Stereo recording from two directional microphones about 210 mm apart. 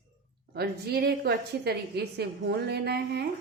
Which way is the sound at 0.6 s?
50° right (ahead or behind).